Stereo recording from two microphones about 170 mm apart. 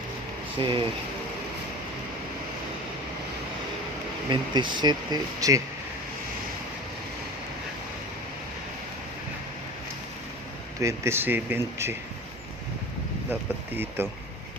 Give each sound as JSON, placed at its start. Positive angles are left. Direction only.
{"t": 0.6, "sound": "speech", "side_deg": -30}
{"t": 4.3, "sound": "speech", "side_deg": -25}
{"t": 10.8, "sound": "speech", "side_deg": -15}